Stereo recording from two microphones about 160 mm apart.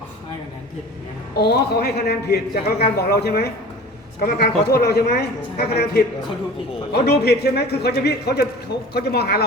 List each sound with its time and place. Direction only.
1.4 s a man's voice: 85° left